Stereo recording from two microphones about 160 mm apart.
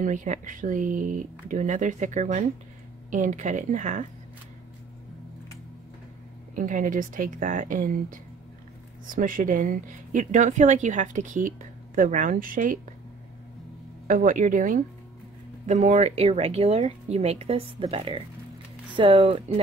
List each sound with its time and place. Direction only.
0.0 s a woman's voice: 55° right (ahead or behind)
6.5 s a woman's voice: 55° right (ahead or behind)
14.0 s speech: 55° right (ahead or behind); by 19.6 s 35° right (ahead or behind)